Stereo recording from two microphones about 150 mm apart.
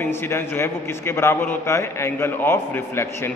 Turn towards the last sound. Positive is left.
turn(degrees=15)  # may be behind; listen again after turning